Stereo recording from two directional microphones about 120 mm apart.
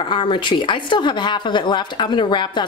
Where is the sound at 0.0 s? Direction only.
45° left (ahead or behind).